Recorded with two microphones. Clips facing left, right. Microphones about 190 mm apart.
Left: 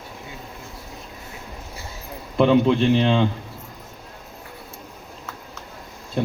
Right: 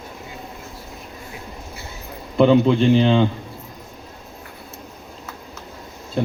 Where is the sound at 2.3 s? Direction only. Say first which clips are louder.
Right 2 dB; centre (ahead or behind).